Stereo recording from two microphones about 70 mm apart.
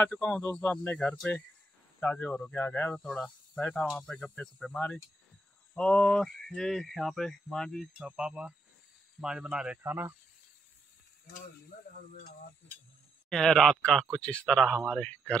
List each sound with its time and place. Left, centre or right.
0.0 s speech: left
3.0 s speech: centre
5.8 s speech: centre
8.0 s speech: centre
9.8 s speech: right
13.3 s speech: centre